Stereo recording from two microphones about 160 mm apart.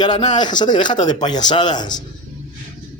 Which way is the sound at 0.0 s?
25° left (ahead or behind).